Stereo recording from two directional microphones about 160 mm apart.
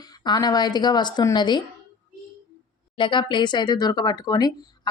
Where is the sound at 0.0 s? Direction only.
25° left (ahead or behind).